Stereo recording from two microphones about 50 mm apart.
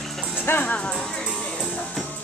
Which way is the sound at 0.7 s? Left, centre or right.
Left.